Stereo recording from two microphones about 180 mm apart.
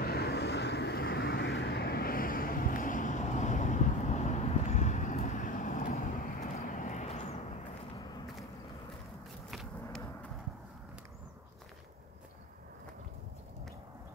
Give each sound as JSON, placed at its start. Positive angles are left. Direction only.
{"t": 0.0, "sound": "vehicle", "side_deg": 60}